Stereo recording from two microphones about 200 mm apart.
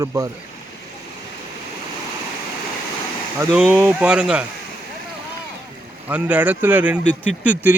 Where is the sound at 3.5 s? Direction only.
5° right (ahead or behind).